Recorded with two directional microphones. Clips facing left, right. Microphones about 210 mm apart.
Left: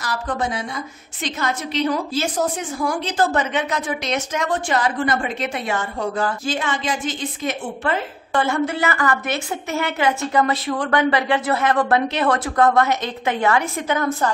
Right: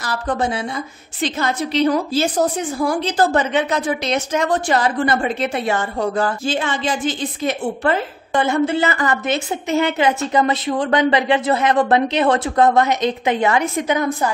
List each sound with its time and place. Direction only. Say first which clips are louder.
0.0 s a woman's voice: right 3 dB; 30° right (ahead or behind)
8.3 s a woman's voice: right 3 dB; 20° right (ahead or behind)